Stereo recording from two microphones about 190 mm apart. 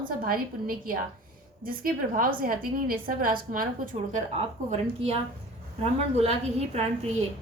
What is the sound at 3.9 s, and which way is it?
A woman's voice, 35° right (ahead or behind).